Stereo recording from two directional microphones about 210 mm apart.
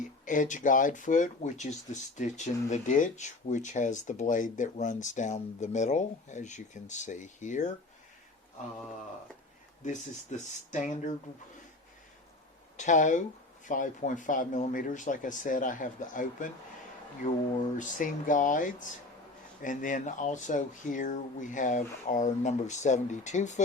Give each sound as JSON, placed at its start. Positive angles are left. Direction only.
{"t": 0.3, "sound": "speech", "side_deg": 35}
{"t": 9.8, "sound": "speech", "side_deg": 35}
{"t": 12.7, "sound": "speech", "side_deg": 35}
{"t": 17.7, "sound": "speech", "side_deg": 40}